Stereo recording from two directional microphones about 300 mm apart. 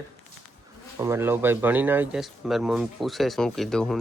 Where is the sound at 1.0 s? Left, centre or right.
Centre.